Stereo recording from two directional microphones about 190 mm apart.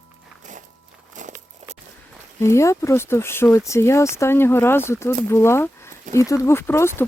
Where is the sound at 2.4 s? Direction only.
15° left (ahead or behind).